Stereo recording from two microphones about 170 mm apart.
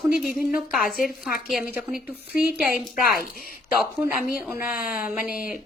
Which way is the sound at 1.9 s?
5° right (ahead or behind).